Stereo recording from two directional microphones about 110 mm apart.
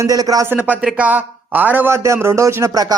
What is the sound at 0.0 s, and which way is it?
Speech, 35° right (ahead or behind).